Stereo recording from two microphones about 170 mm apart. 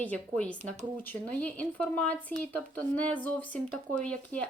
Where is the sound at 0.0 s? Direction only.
10° left (ahead or behind).